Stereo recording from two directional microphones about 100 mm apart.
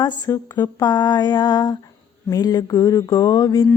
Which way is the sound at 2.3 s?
40° left (ahead or behind).